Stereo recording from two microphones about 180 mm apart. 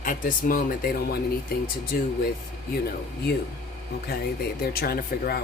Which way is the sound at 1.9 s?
55° left (ahead or behind).